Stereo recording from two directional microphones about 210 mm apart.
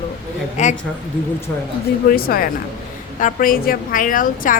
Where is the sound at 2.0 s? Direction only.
45° left (ahead or behind).